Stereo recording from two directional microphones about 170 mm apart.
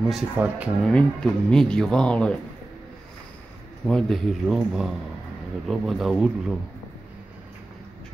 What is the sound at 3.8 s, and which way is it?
A man's voice, centre (ahead or behind).